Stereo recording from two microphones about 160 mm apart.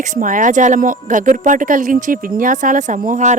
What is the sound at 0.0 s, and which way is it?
A woman's voice, 55° right (ahead or behind).